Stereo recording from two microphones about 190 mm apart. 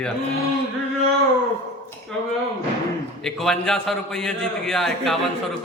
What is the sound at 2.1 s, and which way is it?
A man's voice, 5° left (ahead or behind).